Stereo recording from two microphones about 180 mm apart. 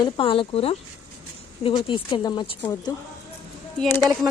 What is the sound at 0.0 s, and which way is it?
Speech, 30° left (ahead or behind).